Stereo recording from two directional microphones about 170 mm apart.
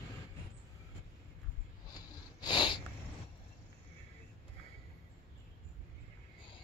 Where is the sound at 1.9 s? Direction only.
25° left (ahead or behind).